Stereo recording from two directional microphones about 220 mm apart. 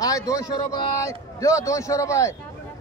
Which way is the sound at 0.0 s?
15° left (ahead or behind).